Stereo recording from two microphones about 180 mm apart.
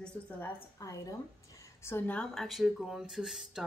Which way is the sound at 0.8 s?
15° left (ahead or behind).